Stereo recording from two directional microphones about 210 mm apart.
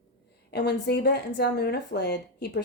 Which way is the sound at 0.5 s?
50° left (ahead or behind).